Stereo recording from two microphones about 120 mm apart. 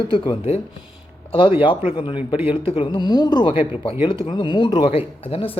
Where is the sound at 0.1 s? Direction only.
50° left (ahead or behind).